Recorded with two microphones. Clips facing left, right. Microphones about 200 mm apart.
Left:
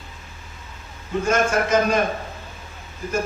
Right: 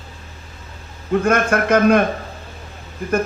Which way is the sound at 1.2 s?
60° right (ahead or behind).